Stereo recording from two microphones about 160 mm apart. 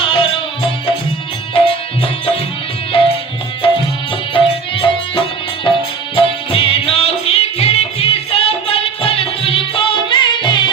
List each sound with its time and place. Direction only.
0.0 s music: 35° left (ahead or behind)
1.5 s music: 35° left (ahead or behind)